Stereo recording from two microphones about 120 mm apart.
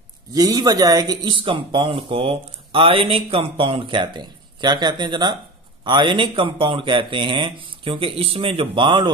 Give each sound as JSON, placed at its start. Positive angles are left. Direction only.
{"t": 0.3, "sound": "speech", "side_deg": -30}